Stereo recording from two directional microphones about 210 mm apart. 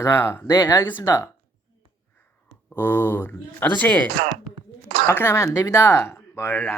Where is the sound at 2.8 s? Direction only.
10° left (ahead or behind).